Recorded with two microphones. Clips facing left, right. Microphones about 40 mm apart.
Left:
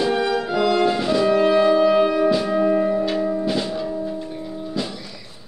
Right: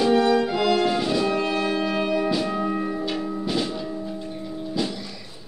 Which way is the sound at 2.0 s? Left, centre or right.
Centre.